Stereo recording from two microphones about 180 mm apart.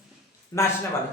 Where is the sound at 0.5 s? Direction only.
20° left (ahead or behind).